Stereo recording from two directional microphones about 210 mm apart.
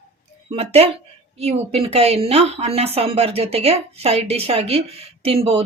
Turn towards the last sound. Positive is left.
turn(degrees=-30)  # may be behind; listen again after turning